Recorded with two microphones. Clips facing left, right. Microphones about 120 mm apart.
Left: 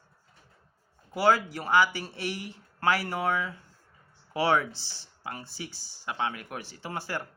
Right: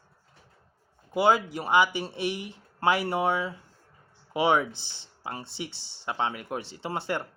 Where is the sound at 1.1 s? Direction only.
20° right (ahead or behind).